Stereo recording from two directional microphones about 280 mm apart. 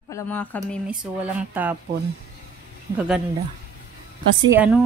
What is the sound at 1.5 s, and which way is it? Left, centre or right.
Speech, centre.